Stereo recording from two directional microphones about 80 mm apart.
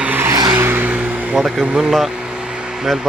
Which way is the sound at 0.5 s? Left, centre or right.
Right.